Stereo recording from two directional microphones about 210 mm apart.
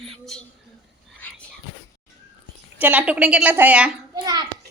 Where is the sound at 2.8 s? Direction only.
10° right (ahead or behind).